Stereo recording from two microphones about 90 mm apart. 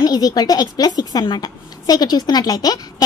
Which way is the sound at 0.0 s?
50° left (ahead or behind).